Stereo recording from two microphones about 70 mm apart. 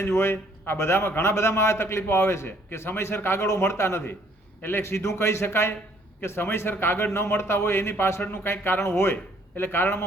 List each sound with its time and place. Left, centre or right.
0.0 s a man's voice: left